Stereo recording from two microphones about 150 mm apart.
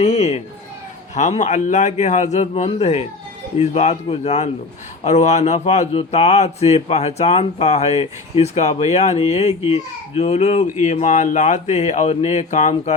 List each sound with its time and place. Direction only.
0.0 s speech: 45° left (ahead or behind)